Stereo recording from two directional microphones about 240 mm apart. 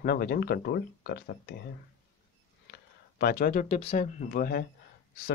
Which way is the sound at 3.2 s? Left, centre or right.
Left.